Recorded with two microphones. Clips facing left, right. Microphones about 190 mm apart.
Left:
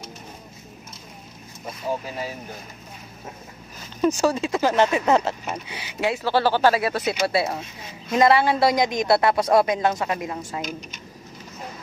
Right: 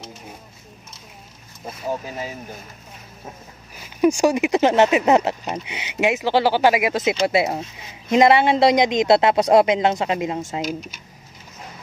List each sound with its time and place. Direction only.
4.0 s a woman's voice: 15° right (ahead or behind)